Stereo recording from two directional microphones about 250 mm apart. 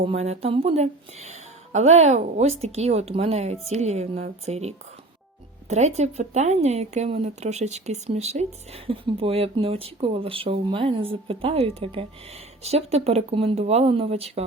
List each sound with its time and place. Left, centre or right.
0.0 s speech: right